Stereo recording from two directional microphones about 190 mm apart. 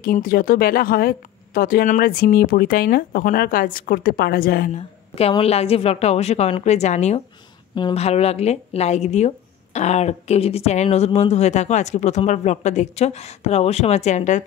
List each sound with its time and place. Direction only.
0.0 s speech: 45° left (ahead or behind)
4.7 s speech: 30° left (ahead or behind)